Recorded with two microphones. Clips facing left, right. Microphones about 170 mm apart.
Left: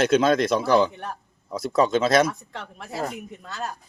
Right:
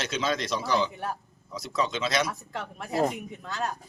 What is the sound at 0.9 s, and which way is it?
Speech, centre (ahead or behind).